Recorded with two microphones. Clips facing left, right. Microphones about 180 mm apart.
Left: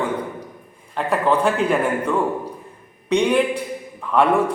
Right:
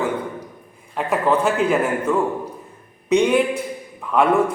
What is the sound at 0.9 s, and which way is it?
A man's voice, 5° right (ahead or behind).